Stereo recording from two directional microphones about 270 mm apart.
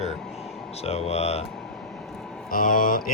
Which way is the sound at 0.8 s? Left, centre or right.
Left.